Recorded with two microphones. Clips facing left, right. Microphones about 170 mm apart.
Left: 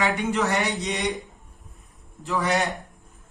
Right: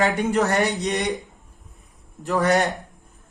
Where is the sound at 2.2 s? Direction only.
45° right (ahead or behind).